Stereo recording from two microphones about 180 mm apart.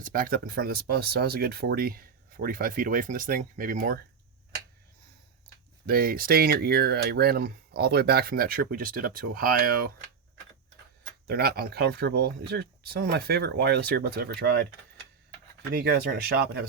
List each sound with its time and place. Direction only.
0.0 s speech: 50° right (ahead or behind)
5.8 s speech: 55° right (ahead or behind)
11.3 s speech: 60° right (ahead or behind)
15.7 s speech: 55° right (ahead or behind)